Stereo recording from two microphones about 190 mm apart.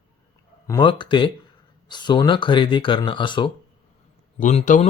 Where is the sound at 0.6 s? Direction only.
20° left (ahead or behind).